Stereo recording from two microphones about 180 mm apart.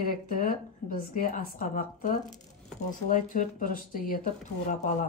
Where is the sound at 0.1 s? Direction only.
50° left (ahead or behind).